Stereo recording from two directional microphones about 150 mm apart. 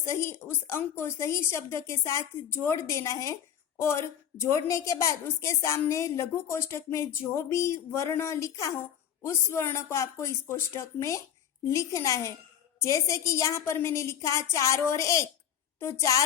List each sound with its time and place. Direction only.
0.0 s a woman's voice: 20° left (ahead or behind)